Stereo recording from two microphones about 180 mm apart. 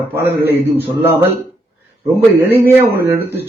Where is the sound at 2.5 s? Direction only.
10° right (ahead or behind).